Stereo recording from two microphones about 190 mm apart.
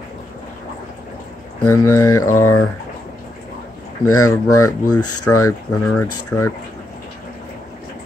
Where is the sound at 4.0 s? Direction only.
15° left (ahead or behind).